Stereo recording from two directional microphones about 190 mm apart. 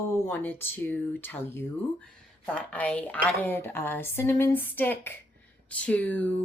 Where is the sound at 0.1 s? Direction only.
10° left (ahead or behind).